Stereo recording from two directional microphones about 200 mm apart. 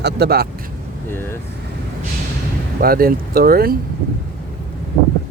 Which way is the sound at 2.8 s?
45° right (ahead or behind).